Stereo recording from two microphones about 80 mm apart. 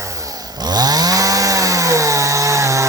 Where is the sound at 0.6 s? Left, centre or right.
Right.